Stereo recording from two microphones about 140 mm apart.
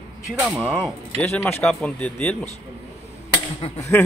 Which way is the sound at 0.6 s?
Centre (ahead or behind).